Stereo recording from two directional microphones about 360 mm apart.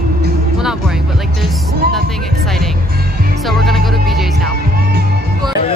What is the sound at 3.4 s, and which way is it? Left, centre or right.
Music, centre.